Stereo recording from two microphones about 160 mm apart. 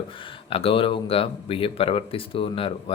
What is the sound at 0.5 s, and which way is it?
Speech, 35° left (ahead or behind).